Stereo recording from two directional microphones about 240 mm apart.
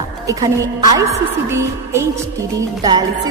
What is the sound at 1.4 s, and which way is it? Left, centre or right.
A man's voice, centre.